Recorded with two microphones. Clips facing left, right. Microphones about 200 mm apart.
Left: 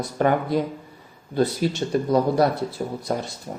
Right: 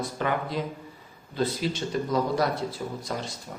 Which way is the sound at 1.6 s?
50° left (ahead or behind).